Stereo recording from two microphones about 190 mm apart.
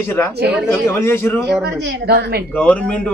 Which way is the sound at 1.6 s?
65° right (ahead or behind).